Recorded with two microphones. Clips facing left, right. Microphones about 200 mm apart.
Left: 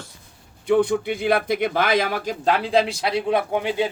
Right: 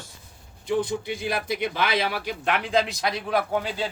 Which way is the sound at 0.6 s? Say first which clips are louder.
Left 7 dB; 65° left (ahead or behind).